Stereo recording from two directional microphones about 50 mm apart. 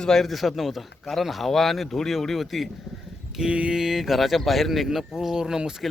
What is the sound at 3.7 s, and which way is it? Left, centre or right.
A man's voice, centre.